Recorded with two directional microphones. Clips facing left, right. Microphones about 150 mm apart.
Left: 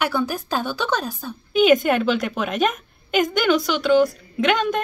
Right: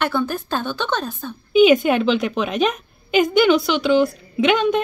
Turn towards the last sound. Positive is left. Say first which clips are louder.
# right 3 dB
turn(degrees=0)  # may be behind; listen again after turning